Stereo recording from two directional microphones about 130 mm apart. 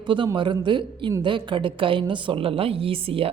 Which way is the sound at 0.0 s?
35° right (ahead or behind).